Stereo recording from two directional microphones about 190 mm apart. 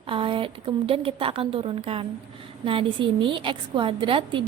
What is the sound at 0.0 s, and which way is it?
A woman's voice, 25° right (ahead or behind).